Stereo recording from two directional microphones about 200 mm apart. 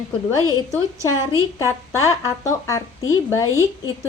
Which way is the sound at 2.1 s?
15° left (ahead or behind).